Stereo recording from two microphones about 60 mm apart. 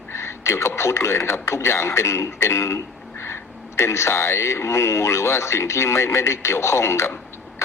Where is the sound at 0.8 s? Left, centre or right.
Left.